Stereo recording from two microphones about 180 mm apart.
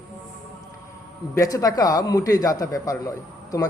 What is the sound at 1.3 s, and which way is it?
A man's voice, 20° left (ahead or behind).